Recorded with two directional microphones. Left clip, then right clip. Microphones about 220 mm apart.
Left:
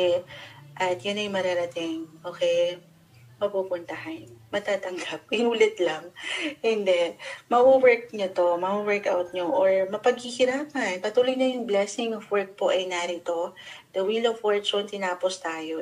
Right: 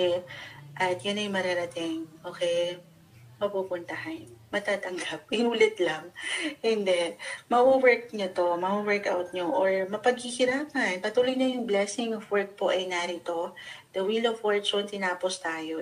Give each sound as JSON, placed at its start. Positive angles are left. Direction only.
{"t": 0.7, "sound": "speech", "side_deg": -35}